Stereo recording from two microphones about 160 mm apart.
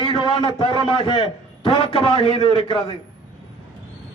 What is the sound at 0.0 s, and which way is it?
A man's voice, 30° left (ahead or behind).